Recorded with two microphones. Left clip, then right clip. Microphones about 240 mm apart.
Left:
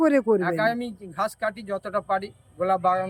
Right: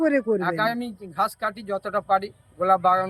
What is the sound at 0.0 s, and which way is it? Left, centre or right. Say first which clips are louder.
Speech: left 1 dB; centre.